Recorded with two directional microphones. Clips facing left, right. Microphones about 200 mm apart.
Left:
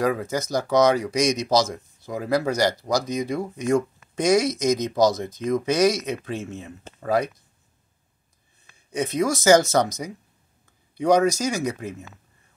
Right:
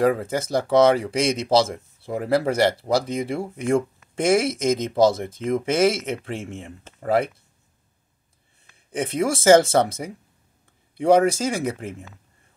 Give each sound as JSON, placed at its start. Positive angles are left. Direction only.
{"t": 0.0, "sound": "speech", "side_deg": -30}
{"t": 6.4, "sound": "speech", "side_deg": -15}
{"t": 7.0, "sound": "speech", "side_deg": -25}
{"t": 8.9, "sound": "speech", "side_deg": -30}